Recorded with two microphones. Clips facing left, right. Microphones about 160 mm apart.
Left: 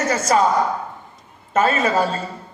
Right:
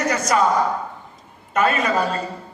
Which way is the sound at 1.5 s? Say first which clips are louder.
Left 2 dB; 25° left (ahead or behind).